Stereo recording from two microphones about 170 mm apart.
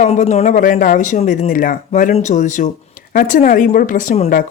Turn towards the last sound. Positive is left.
turn(degrees=45)  # may be behind; listen again after turning